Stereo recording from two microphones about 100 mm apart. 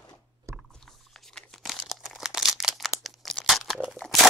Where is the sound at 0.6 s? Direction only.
5° left (ahead or behind).